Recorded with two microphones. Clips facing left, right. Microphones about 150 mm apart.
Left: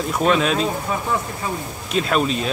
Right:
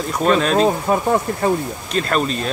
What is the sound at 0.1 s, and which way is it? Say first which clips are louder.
Speech: right 2 dB; 5° left (ahead or behind).